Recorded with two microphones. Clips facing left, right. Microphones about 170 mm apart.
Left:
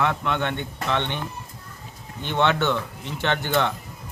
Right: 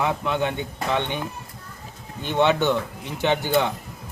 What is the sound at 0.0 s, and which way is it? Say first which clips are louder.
Speech: right 1 dB; 10° right (ahead or behind).